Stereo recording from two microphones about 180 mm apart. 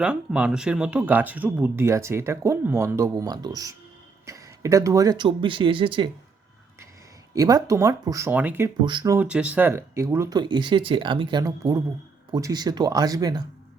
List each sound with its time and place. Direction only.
0.0 s speech: 5° right (ahead or behind); by 6.1 s 30° right (ahead or behind)
7.3 s speech: 20° right (ahead or behind)
8.8 s speech: 25° right (ahead or behind)
9.1 s speech: 5° right (ahead or behind)